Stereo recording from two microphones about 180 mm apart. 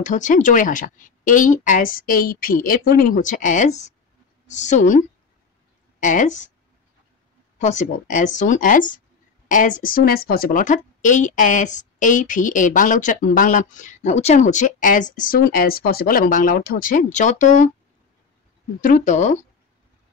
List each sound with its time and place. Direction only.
0.0 s a woman's voice: 45° left (ahead or behind)
7.5 s a woman's voice: 40° left (ahead or behind)
18.8 s a woman's voice: 50° left (ahead or behind)